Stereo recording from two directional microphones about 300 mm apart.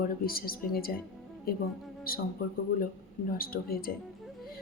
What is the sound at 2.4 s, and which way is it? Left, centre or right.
A woman's voice, left.